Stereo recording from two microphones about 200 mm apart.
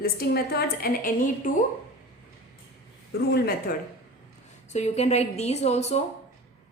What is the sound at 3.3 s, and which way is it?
Speech, 50° left (ahead or behind).